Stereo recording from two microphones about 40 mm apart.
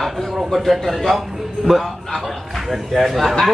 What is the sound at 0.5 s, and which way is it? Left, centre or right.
Speech, centre.